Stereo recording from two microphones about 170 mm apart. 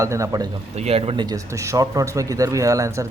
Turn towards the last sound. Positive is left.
turn(degrees=-20)  # may be behind; listen again after turning